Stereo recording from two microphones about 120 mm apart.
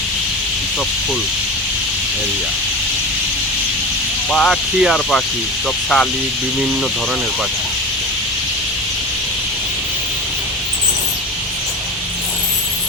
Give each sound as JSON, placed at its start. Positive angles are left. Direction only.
{"t": 4.3, "sound": "speech", "side_deg": 5}